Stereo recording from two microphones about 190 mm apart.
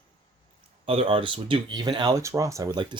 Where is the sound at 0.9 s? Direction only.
30° right (ahead or behind).